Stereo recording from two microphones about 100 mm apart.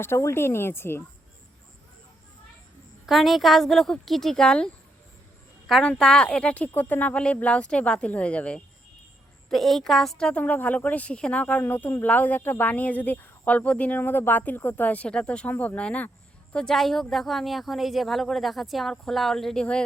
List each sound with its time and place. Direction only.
0.0 s speech: 25° left (ahead or behind)
3.1 s a woman's voice: centre (ahead or behind)
5.8 s speech: 10° left (ahead or behind)
9.5 s a woman's voice: centre (ahead or behind)